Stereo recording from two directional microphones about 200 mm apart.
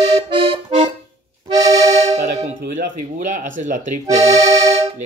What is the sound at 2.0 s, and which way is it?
Music, 35° right (ahead or behind).